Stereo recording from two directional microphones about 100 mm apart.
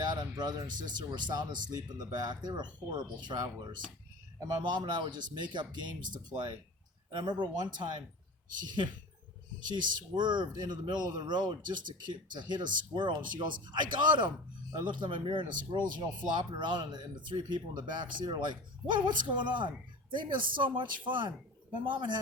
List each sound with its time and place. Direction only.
0.0 s speech: 45° right (ahead or behind)
7.1 s a man's voice: 45° right (ahead or behind)